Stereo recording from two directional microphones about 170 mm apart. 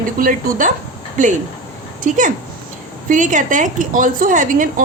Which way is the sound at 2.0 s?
50° right (ahead or behind).